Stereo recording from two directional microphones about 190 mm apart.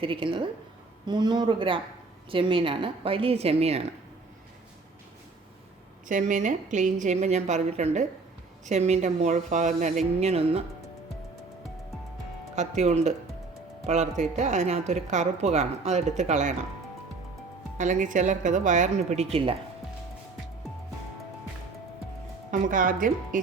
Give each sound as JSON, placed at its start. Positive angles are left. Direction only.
{"t": 0.0, "sound": "a woman's voice", "side_deg": -25}
{"t": 6.1, "sound": "a woman's voice", "side_deg": -40}
{"t": 12.5, "sound": "a woman's voice", "side_deg": -35}
{"t": 17.7, "sound": "a woman's voice", "side_deg": -40}
{"t": 22.6, "sound": "speech", "side_deg": -45}